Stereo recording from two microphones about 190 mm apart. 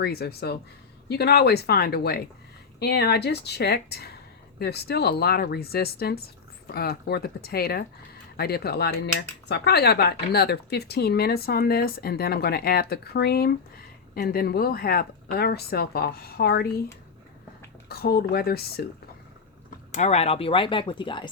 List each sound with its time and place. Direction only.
0.0 s cutlery: 55° left (ahead or behind)
17.8 s cutlery: 55° left (ahead or behind)
19.9 s speech: 35° left (ahead or behind)